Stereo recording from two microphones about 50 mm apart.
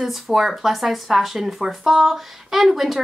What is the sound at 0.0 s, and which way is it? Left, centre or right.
Speech, centre.